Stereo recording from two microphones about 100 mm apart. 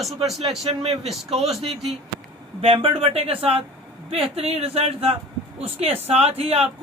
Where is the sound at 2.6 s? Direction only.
65° right (ahead or behind).